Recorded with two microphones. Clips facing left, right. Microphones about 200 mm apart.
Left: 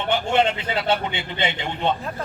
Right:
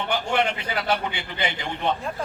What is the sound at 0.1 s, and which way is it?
A man's voice, 25° left (ahead or behind).